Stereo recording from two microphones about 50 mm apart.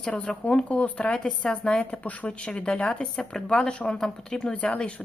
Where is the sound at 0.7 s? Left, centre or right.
Left.